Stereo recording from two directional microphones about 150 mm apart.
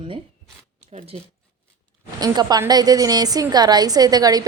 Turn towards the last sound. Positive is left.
turn(degrees=-25)  # may be behind; listen again after turning